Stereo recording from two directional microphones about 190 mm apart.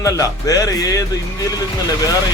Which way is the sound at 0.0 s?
15° left (ahead or behind).